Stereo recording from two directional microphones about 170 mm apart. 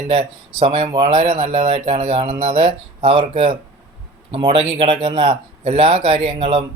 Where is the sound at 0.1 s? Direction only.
35° right (ahead or behind).